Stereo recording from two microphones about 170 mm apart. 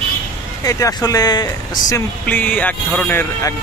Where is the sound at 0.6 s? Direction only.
20° left (ahead or behind).